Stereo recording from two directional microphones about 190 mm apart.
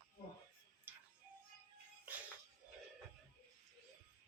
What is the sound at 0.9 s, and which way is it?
Music, 10° right (ahead or behind).